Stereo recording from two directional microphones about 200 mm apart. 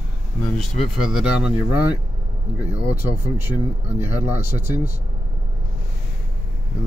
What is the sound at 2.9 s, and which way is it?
Speech, 10° right (ahead or behind).